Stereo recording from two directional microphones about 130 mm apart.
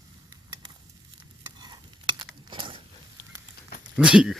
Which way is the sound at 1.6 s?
35° right (ahead or behind).